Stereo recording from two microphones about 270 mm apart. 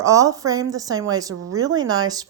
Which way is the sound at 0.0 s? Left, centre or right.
Centre.